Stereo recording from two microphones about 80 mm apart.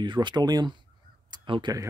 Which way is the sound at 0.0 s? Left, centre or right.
Right.